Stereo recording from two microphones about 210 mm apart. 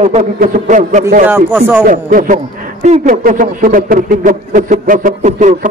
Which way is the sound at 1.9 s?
40° right (ahead or behind).